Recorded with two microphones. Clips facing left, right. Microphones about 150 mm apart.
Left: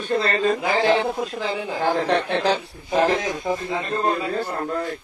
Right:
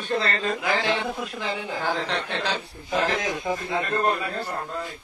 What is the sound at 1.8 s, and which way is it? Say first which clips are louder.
A man's voice: left 9 dB; 50° left (ahead or behind).